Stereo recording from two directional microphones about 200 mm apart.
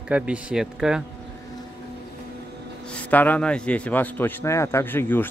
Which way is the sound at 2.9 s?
10° left (ahead or behind).